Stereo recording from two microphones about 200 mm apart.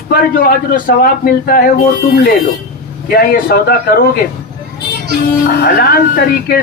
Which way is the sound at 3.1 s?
45° left (ahead or behind).